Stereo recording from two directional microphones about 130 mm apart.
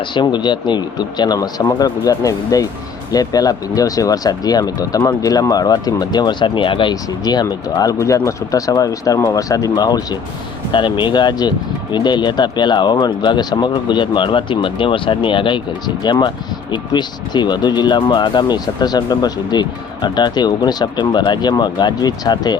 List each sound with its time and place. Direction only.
0.1 s speech: 35° left (ahead or behind)
16.7 s speech: 35° left (ahead or behind)